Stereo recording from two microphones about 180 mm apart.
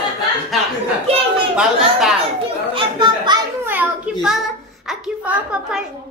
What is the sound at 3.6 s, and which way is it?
Children playing, 10° right (ahead or behind).